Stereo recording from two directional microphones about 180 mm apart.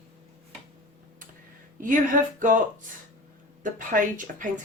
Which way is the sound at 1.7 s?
45° right (ahead or behind).